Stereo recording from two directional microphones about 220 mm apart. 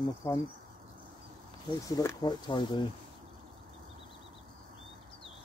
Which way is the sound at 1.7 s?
20° left (ahead or behind).